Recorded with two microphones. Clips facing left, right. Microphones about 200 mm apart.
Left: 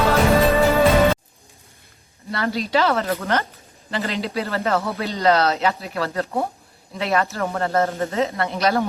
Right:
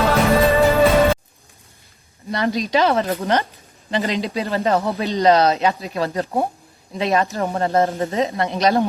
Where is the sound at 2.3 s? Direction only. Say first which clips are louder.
Right 2 dB; 20° right (ahead or behind).